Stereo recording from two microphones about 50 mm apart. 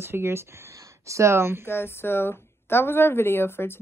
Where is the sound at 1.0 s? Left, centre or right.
Right.